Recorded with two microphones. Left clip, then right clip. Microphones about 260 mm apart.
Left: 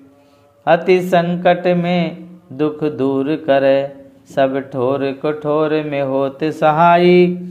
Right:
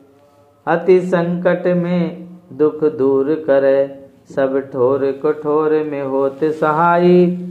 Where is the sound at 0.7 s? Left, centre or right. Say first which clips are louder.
Left 1 dB; left.